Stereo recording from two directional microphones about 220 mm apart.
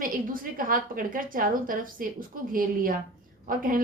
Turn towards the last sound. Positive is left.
turn(degrees=-40)  # may be behind; listen again after turning